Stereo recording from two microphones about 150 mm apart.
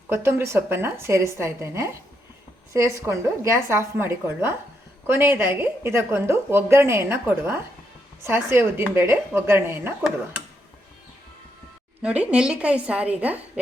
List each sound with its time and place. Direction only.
0.1 s a woman's voice: 15° right (ahead or behind)
12.0 s a woman's voice: 10° right (ahead or behind)